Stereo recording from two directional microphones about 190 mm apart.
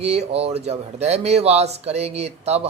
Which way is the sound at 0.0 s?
35° right (ahead or behind).